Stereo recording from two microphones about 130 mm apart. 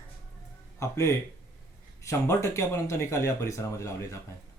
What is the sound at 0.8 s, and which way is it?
Speech, 25° left (ahead or behind).